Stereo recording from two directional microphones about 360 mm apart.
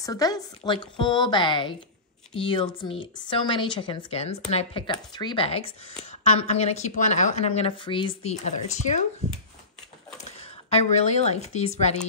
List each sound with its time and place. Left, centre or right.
0.0 s speech: centre
10.7 s speech: centre